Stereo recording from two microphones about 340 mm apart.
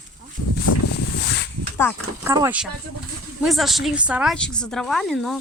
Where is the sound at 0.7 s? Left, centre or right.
Left.